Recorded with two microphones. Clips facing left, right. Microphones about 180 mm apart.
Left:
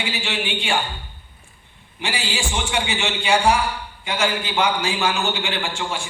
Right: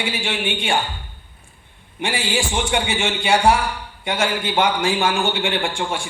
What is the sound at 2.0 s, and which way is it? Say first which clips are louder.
A man's voice: right 4 dB; 50° right (ahead or behind).